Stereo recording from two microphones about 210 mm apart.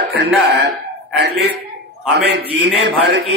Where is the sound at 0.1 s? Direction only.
55° right (ahead or behind).